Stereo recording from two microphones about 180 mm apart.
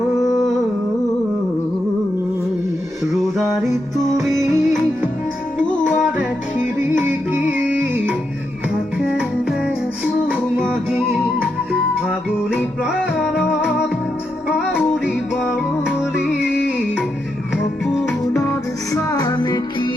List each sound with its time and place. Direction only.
3.1 s music: centre (ahead or behind)
6.7 s music: 10° right (ahead or behind)
10.2 s music: 5° right (ahead or behind)
13.2 s music: centre (ahead or behind)
15.0 s music: centre (ahead or behind)
18.9 s music: 20° left (ahead or behind)